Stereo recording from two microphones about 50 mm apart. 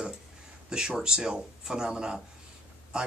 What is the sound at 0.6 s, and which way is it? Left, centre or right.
Speech, centre.